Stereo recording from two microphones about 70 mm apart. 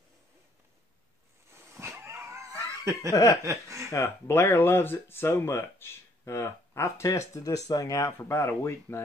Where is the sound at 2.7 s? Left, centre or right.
Right.